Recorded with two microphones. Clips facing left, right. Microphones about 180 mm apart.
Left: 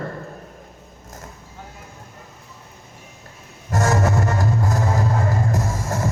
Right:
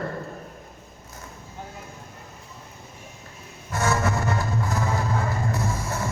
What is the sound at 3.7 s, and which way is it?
Music, 40° left (ahead or behind).